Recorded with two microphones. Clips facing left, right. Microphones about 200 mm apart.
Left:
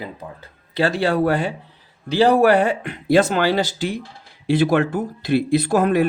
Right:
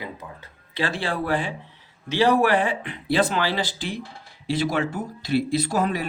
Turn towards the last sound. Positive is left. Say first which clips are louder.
# left 7 dB
turn(degrees=55)  # may be behind; listen again after turning